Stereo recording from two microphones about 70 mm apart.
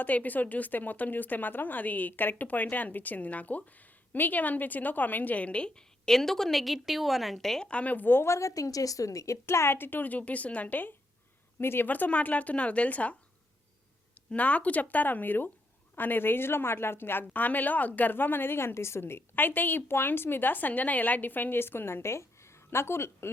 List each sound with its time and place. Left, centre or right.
0.0 s a woman's voice: left; by 7.7 s centre
7.7 s a woman's voice: centre; by 11.9 s left
11.9 s a woman's voice: left
14.3 s a woman's voice: left